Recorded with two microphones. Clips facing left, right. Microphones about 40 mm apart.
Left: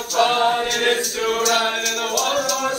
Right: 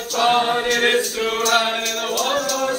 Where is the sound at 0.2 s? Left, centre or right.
Centre.